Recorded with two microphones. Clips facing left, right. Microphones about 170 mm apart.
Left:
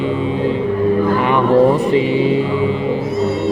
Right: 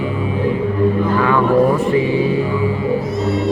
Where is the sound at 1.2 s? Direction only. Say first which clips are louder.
Left 2 dB; 20° left (ahead or behind).